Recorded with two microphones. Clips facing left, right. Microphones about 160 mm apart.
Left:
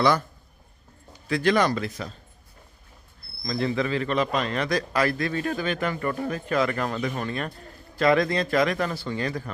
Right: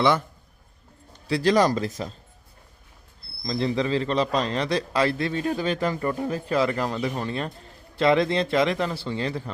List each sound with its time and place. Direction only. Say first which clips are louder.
0.0 s a man's voice: even; 25° right (ahead or behind)
1.3 s speech: right 2 dB; 35° right (ahead or behind)
3.4 s a man's voice: right 1 dB; 25° right (ahead or behind)